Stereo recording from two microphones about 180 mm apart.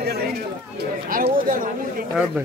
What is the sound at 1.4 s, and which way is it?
Speech, 50° right (ahead or behind).